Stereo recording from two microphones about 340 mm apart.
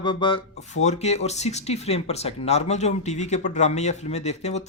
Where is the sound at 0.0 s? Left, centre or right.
Centre.